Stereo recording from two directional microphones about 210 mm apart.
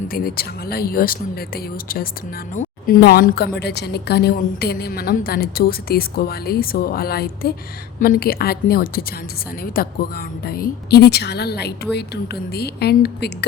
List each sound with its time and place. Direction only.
0.1 s a woman's voice: 45° left (ahead or behind)